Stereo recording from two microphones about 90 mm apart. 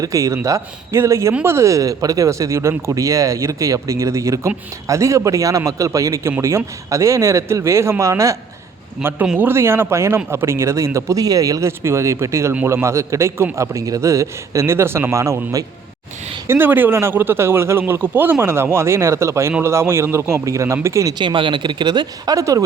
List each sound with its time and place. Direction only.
0.0 s speech: 40° right (ahead or behind)
9.0 s a man's voice: 10° right (ahead or behind)
9.4 s a man's voice: 25° right (ahead or behind)
21.2 s speech: 65° right (ahead or behind)
22.4 s speech: 35° right (ahead or behind)